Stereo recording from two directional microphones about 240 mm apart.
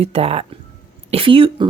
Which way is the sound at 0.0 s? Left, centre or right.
Right.